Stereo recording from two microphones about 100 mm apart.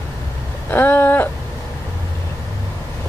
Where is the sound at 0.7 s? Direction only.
20° left (ahead or behind).